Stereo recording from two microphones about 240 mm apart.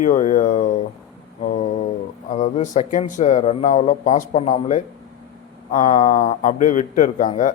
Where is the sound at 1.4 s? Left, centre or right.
Left.